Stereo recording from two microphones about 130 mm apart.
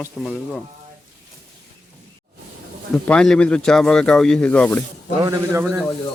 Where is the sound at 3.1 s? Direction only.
5° left (ahead or behind).